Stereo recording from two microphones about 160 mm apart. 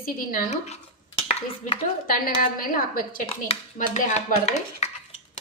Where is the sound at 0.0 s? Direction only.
60° left (ahead or behind).